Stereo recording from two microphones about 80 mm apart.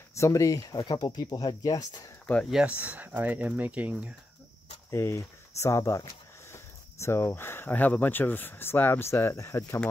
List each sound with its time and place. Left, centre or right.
0.1 s speech: left
0.8 s speech: left
2.5 s speech: centre
4.9 s speech: left
6.5 s speech: left